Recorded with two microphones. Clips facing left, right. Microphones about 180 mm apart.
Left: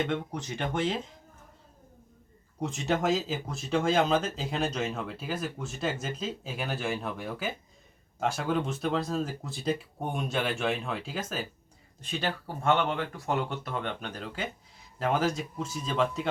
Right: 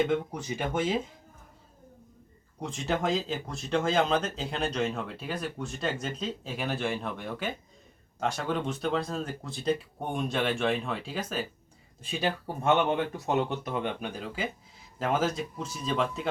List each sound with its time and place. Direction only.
0.0 s speech: 5° right (ahead or behind)
2.6 s speech: centre (ahead or behind)
12.1 s speech: 15° right (ahead or behind)